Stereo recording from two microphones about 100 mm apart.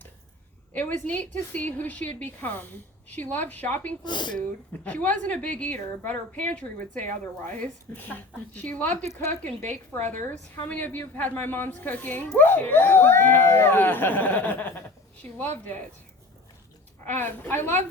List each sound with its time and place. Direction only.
0.7 s a woman's voice: 15° left (ahead or behind)
4.0 s speech: 50° left (ahead or behind)
4.4 s a woman's voice: 15° left (ahead or behind)
17.1 s a woman's voice: 20° left (ahead or behind)